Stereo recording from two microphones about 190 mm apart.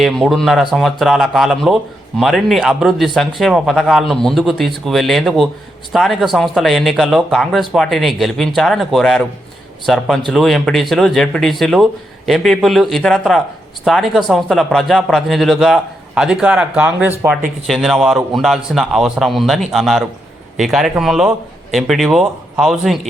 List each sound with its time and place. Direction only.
0.0 s speech: centre (ahead or behind)